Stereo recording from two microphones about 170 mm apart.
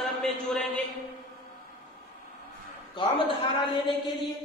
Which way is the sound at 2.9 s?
30° left (ahead or behind).